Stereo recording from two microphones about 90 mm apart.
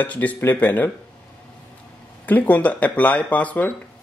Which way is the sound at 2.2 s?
20° left (ahead or behind).